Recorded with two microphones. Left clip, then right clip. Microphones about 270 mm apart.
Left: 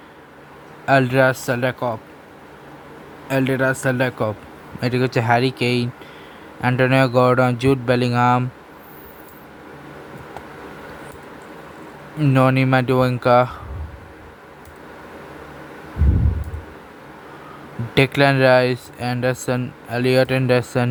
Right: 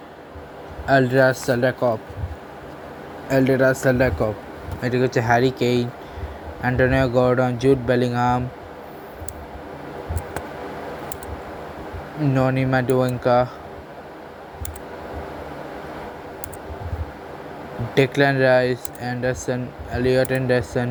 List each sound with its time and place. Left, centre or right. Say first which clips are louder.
1.1 s speech: left 1 dB; left
1.6 s speech: right 3 dB; centre
3.2 s speech: right 2 dB; centre
4.8 s speech: even; left
12.3 s speech: left 4 dB; left
17.9 s speech: left 2 dB; left